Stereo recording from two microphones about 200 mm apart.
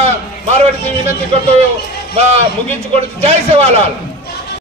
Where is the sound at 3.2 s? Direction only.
30° right (ahead or behind).